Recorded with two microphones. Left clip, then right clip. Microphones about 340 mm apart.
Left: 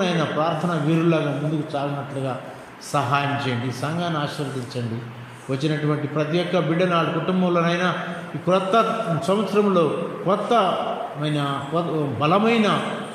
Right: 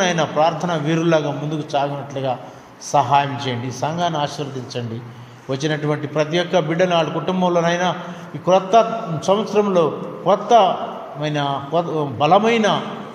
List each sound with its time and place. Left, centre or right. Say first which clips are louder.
0.0 s a man's voice: right 5 dB; right
5.5 s a man's voice: right 3 dB; right